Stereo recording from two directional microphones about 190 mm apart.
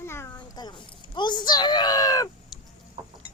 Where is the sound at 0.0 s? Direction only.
15° left (ahead or behind).